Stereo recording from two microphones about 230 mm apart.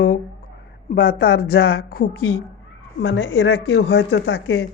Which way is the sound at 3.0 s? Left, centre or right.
Left.